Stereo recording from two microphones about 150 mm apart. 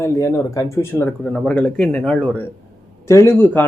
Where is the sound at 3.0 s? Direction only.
20° left (ahead or behind).